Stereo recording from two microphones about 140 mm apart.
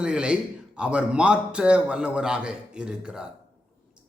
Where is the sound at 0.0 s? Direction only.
5° right (ahead or behind).